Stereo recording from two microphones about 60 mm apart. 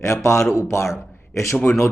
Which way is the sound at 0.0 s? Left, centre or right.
Left.